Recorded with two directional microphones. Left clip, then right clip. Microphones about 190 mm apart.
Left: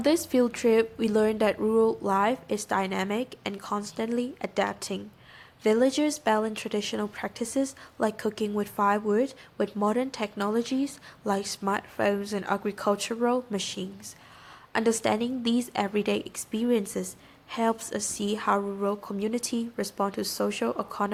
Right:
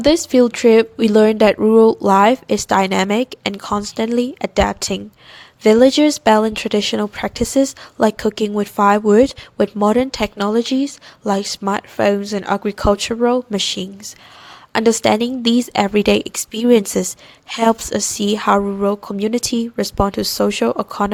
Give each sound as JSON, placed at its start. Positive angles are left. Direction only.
{"t": 0.0, "sound": "a woman's voice", "side_deg": -40}